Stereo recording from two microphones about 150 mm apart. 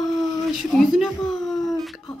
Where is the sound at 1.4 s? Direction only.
Centre (ahead or behind).